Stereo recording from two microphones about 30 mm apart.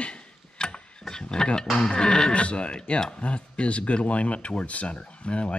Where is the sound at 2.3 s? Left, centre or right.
Left.